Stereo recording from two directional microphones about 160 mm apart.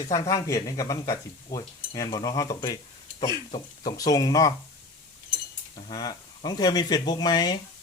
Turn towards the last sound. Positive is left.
turn(degrees=25)  # may be behind; listen again after turning